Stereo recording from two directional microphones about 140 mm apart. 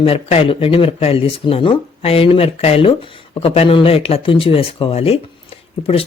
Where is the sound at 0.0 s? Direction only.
45° left (ahead or behind).